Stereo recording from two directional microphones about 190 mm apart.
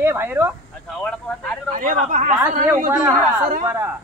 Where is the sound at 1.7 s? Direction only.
45° right (ahead or behind).